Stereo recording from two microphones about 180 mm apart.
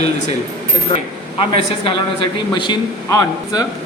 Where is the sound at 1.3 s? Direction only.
30° left (ahead or behind).